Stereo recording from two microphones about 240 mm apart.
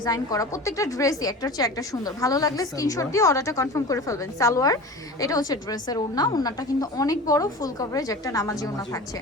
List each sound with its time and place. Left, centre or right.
0.0 s a woman's voice: centre